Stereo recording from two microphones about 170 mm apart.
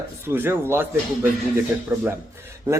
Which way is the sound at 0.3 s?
10° right (ahead or behind).